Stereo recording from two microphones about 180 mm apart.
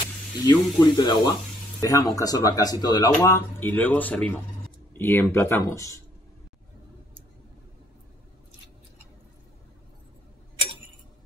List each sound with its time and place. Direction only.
0.5 s speech: 25° left (ahead or behind)